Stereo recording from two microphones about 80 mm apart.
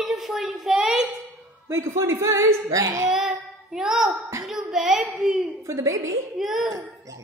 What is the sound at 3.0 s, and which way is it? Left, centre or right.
Child singing, centre.